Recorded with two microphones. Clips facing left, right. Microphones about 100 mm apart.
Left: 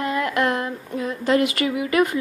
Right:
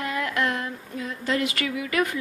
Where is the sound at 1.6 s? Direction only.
45° left (ahead or behind).